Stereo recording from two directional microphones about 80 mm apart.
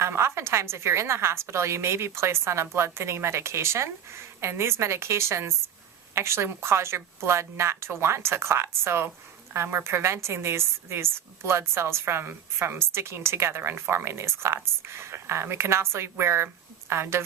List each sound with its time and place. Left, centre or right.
0.0 s a woman's voice: right